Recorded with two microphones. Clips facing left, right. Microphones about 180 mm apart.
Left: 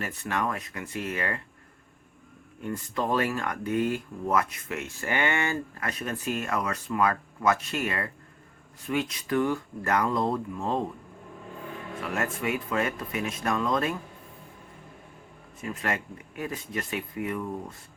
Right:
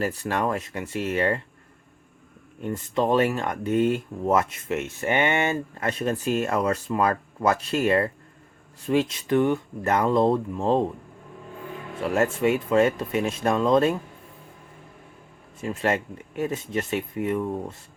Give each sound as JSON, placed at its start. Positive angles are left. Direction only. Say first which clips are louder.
{"t": 0.0, "sound": "speech", "louder": "right 5 dB", "side_deg": -35}
{"t": 2.6, "sound": "speech", "louder": "right 5 dB", "side_deg": -25}
{"t": 12.1, "sound": "speech", "louder": "right 8 dB", "side_deg": -30}
{"t": 15.6, "sound": "speech", "louder": "right 6 dB", "side_deg": -25}